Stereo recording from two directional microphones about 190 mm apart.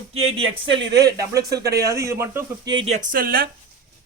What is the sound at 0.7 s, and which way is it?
Speech, 65° right (ahead or behind).